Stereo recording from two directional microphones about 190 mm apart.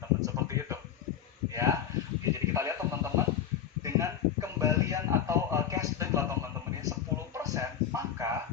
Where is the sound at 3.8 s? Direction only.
15° right (ahead or behind).